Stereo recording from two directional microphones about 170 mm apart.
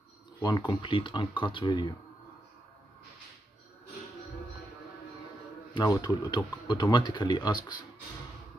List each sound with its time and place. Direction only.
0.4 s speech: 25° left (ahead or behind)
5.8 s speech: 25° left (ahead or behind)